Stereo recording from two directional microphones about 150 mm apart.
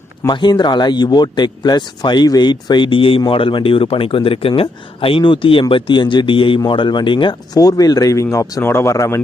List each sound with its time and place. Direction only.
0.2 s speech: 30° left (ahead or behind)